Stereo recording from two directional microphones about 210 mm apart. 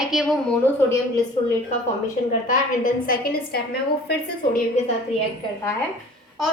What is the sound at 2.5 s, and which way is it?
A woman's voice, 40° left (ahead or behind).